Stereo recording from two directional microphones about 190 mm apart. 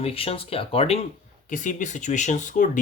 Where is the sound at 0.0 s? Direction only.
30° left (ahead or behind).